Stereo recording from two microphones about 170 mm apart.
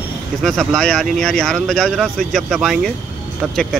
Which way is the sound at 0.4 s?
Centre (ahead or behind).